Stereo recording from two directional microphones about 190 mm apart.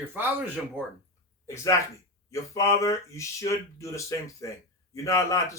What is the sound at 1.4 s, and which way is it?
Speech, 15° left (ahead or behind).